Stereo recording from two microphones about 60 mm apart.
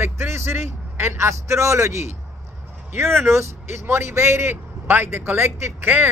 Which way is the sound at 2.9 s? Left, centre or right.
Right.